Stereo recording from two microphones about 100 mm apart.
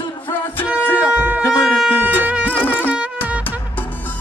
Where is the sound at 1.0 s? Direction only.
15° right (ahead or behind).